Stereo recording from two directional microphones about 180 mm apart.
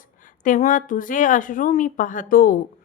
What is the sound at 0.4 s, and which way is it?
Speech, 45° left (ahead or behind).